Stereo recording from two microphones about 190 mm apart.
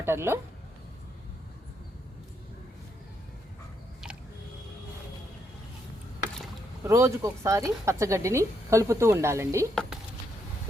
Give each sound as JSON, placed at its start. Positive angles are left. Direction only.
{"t": 0.0, "sound": "speech", "side_deg": -10}
{"t": 6.8, "sound": "speech", "side_deg": -15}